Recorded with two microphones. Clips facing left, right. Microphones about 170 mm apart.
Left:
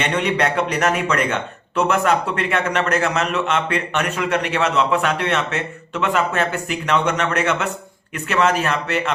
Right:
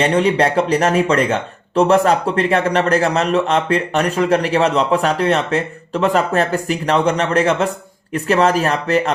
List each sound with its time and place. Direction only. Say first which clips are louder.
0.0 s speech: right 5 dB; 35° right (ahead or behind)